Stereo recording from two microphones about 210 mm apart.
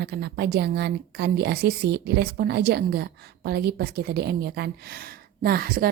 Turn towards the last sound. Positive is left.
turn(degrees=-45)  # may be behind; listen again after turning